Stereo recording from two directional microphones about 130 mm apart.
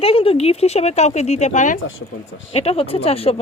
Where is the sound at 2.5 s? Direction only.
50° left (ahead or behind).